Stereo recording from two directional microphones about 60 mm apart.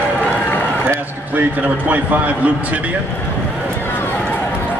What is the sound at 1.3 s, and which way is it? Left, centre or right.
A man's voice, right.